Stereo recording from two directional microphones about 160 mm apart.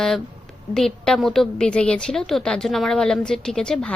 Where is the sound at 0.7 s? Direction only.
5° left (ahead or behind).